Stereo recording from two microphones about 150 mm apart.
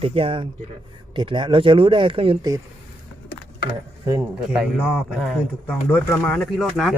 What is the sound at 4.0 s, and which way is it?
Speech, 25° right (ahead or behind).